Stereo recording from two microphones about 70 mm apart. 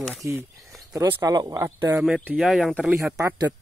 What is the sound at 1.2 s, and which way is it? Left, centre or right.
Speech, right.